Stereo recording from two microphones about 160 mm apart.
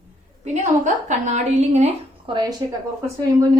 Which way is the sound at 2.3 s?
30° right (ahead or behind).